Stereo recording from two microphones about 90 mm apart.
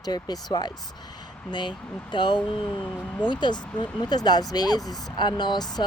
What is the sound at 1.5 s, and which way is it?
Speech, 55° left (ahead or behind).